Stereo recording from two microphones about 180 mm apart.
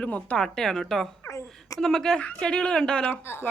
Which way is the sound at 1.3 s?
15° left (ahead or behind).